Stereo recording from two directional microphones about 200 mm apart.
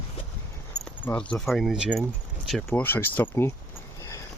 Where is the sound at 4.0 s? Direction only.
15° left (ahead or behind).